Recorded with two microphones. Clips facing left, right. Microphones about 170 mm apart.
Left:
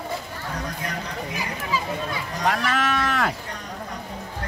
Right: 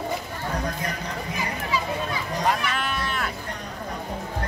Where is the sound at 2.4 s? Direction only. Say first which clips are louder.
Left 3 dB; 70° left (ahead or behind); by 3.3 s 90° left.